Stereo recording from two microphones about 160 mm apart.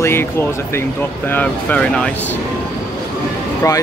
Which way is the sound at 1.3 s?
10° left (ahead or behind).